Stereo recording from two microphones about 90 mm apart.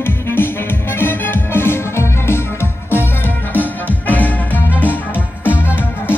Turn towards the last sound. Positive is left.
turn(degrees=25)  # may be behind; listen again after turning